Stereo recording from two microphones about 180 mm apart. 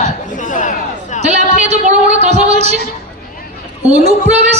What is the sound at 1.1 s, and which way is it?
A man's voice, 40° right (ahead or behind).